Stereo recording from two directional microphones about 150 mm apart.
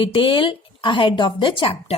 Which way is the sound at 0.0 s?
35° left (ahead or behind).